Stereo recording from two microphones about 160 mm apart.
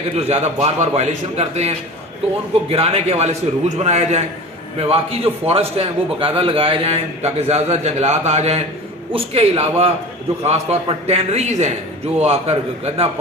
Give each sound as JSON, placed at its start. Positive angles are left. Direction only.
{"t": 0.2, "sound": "a man's voice", "side_deg": -40}